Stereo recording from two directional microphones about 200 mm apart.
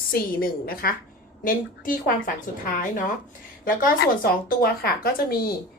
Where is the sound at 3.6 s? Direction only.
45° left (ahead or behind).